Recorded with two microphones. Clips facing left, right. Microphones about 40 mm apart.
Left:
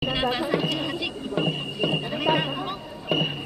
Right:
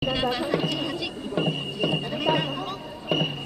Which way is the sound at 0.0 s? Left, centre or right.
Centre.